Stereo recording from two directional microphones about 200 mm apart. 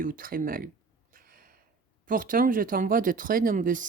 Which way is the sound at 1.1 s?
45° right (ahead or behind).